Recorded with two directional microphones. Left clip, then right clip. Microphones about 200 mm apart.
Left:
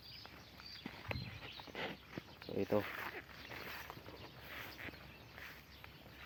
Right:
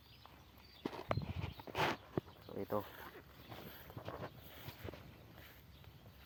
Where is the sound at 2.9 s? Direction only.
50° right (ahead or behind).